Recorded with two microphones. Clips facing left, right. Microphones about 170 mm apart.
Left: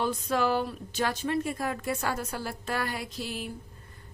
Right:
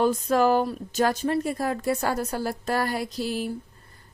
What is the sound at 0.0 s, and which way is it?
A woman's voice, 45° right (ahead or behind).